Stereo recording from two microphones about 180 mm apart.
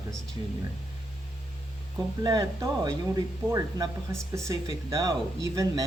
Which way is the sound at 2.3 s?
20° right (ahead or behind).